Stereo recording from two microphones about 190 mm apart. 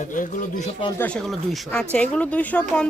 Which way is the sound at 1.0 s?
5° left (ahead or behind).